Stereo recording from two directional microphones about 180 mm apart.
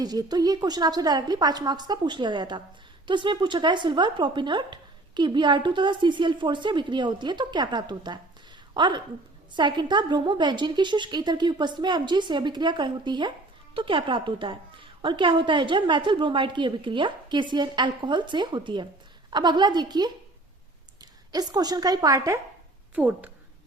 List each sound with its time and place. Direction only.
0.0 s a woman's voice: 20° right (ahead or behind)